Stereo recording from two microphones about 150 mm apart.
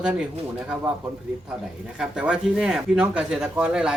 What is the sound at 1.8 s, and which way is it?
Speech, 5° right (ahead or behind).